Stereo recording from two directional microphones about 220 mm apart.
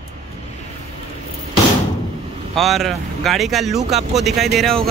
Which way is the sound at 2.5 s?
Centre (ahead or behind).